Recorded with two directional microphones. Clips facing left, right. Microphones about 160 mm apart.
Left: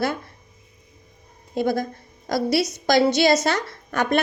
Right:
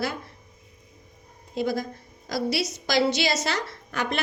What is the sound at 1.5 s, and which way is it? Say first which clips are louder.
A woman's voice: left 4 dB; 55° left (ahead or behind).